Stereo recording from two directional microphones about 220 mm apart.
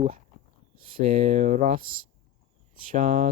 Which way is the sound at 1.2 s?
35° right (ahead or behind).